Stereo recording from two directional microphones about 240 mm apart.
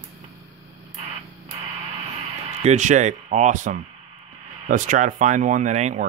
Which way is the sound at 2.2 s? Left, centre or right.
Right.